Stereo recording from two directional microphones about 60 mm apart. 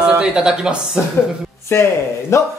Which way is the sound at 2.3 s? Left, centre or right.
Left.